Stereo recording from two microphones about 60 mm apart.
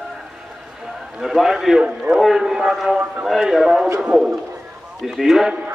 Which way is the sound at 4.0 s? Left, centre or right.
Centre.